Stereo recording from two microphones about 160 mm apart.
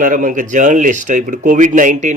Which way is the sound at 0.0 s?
55° right (ahead or behind).